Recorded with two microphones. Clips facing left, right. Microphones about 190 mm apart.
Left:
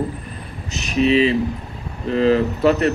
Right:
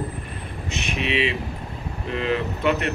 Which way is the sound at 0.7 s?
40° left (ahead or behind).